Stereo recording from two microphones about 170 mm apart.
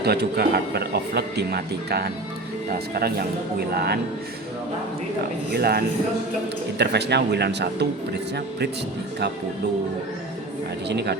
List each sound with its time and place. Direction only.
0.0 s speech: 65° right (ahead or behind)
5.5 s speech: 70° right (ahead or behind)
6.7 s speech: 80° right
10.8 s speech: 75° right (ahead or behind)